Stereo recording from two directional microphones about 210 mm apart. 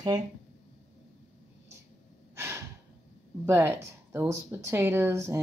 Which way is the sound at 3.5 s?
10° right (ahead or behind).